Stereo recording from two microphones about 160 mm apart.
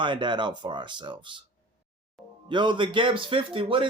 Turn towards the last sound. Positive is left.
turn(degrees=-35)  # may be behind; listen again after turning